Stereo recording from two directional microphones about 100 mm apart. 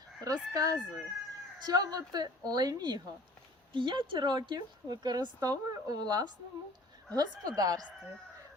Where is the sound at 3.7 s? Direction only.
55° right (ahead or behind).